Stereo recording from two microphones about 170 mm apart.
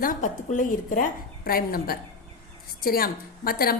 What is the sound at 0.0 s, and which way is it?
A woman's voice, 50° left (ahead or behind).